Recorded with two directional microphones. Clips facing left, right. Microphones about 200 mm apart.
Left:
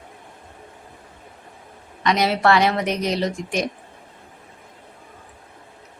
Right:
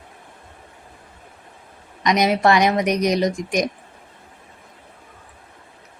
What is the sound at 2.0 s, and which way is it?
A woman's voice, 15° right (ahead or behind).